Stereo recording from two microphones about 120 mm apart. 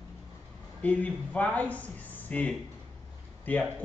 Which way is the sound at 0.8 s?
10° left (ahead or behind).